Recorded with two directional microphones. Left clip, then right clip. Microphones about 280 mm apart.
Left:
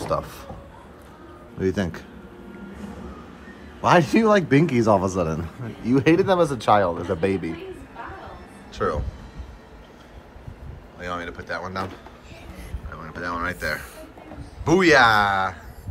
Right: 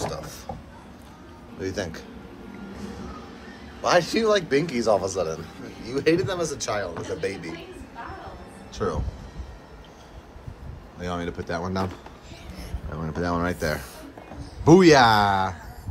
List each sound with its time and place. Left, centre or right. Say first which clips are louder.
0.0 s a sound: left 6 dB; centre
1.6 s a man's voice: left 5 dB; left
3.8 s a man's voice: left 3 dB; left
8.7 s speech: left 3 dB; centre
11.0 s speech: even; right
12.9 s speech: right 2 dB; right